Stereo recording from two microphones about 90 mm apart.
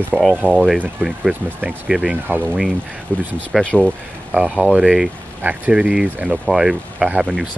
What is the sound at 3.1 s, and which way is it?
Speech, 15° left (ahead or behind).